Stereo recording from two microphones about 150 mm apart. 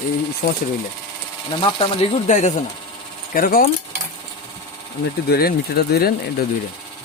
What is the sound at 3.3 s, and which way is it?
Speech, 75° left (ahead or behind).